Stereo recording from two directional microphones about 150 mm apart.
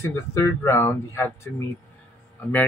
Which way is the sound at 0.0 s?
20° left (ahead or behind).